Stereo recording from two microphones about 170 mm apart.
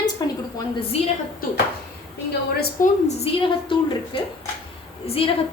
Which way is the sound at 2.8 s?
35° left (ahead or behind).